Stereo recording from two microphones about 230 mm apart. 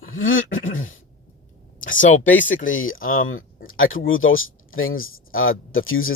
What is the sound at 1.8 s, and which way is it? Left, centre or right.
Speech, left.